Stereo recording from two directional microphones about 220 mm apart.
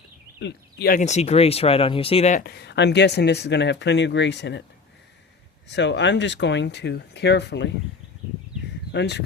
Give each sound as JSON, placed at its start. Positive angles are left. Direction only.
{"t": 0.3, "sound": "speech", "side_deg": 50}
{"t": 2.4, "sound": "speech", "side_deg": 45}
{"t": 5.7, "sound": "speech", "side_deg": 50}
{"t": 8.9, "sound": "speech", "side_deg": 50}